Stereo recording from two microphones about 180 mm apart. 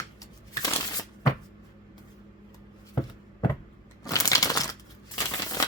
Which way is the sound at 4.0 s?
20° left (ahead or behind).